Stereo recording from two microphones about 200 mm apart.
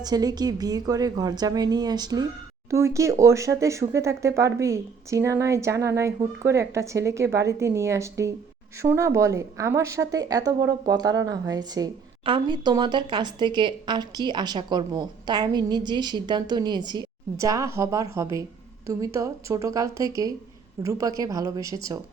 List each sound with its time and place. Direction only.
0.0 s a woman's voice: 20° right (ahead or behind)